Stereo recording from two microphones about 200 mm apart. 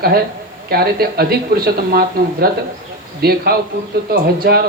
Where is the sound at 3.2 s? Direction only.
50° right (ahead or behind).